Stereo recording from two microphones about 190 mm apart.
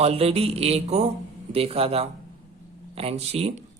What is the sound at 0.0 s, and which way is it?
Speech, 30° right (ahead or behind).